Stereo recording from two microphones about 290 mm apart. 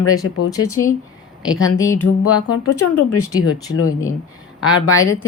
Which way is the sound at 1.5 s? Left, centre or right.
Left.